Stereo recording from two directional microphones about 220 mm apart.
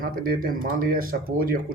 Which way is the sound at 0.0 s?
40° right (ahead or behind).